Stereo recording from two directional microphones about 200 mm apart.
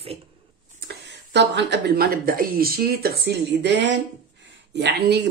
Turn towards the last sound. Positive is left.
turn(degrees=-55)  # may be behind; listen again after turning